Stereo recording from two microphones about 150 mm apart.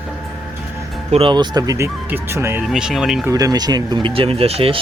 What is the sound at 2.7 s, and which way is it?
Speech, 5° right (ahead or behind).